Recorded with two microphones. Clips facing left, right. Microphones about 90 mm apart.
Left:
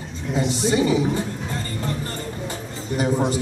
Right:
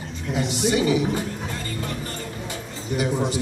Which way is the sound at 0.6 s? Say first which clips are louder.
Left 1 dB; 25° left (ahead or behind).